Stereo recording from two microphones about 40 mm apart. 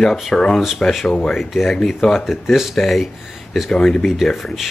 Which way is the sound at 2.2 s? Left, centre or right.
Centre.